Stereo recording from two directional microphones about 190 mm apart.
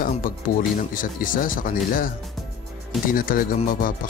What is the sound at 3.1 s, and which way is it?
Speech, 45° left (ahead or behind).